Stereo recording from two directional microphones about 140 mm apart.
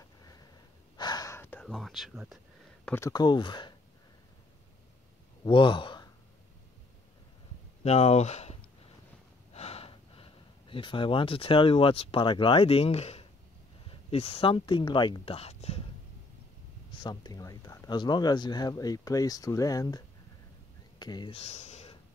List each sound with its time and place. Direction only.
0.9 s gasp: 30° left (ahead or behind); by 1.7 s 15° left (ahead or behind)
1.7 s speech: centre (ahead or behind)
3.1 s speech: 30° left (ahead or behind)
5.4 s speech: 35° left (ahead or behind)
7.8 s speech: 50° left (ahead or behind)
16.9 s speech: 30° left (ahead or behind)
21.0 s speech: 30° left (ahead or behind)
21.3 s speech: 50° left (ahead or behind)